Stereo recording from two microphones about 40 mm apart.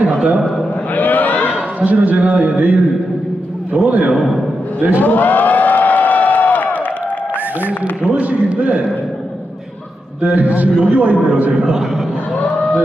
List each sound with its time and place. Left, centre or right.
0.9 s a sound: left
1.8 s a man's voice: right
5.0 s a sound: left
8.0 s a man's voice: right
10.2 s a man's voice: right
11.8 s a man's voice: centre